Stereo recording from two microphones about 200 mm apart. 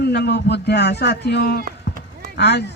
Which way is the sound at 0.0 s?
55° left (ahead or behind).